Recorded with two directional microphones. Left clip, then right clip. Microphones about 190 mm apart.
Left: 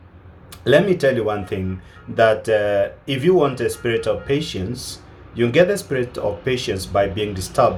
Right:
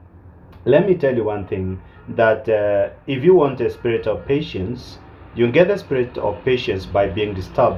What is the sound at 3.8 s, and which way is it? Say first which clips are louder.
Speech: even; 15° left (ahead or behind).